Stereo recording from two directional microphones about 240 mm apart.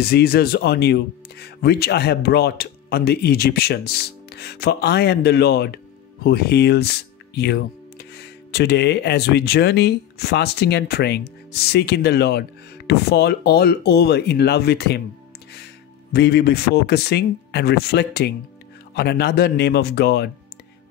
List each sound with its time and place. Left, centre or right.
0.0 s speech: left